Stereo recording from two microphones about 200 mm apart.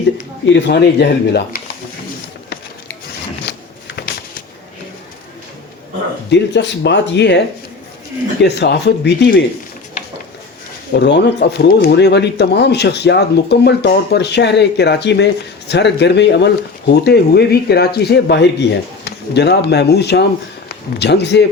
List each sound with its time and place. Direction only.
0.4 s speech: 60° left (ahead or behind)
3.9 s a sound: 50° left (ahead or behind)
6.3 s speech: 60° left (ahead or behind)
10.9 s a man's voice: 55° left (ahead or behind)